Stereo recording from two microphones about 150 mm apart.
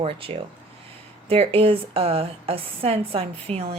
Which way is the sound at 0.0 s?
40° right (ahead or behind).